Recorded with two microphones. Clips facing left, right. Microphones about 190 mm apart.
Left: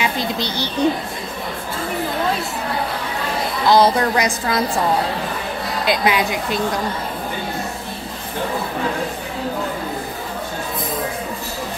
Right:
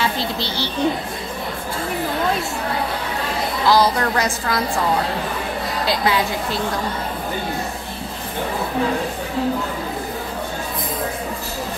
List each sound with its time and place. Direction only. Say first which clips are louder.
0.0 s speech: left 1 dB; 15° left (ahead or behind)
3.6 s speech: left 3 dB; 20° left (ahead or behind)
5.9 s speech: left 2 dB; 15° left (ahead or behind)